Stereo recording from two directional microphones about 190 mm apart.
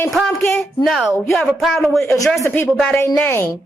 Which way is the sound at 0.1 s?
Centre (ahead or behind).